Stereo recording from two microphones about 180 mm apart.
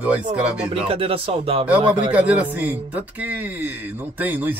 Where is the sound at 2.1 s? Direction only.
10° right (ahead or behind).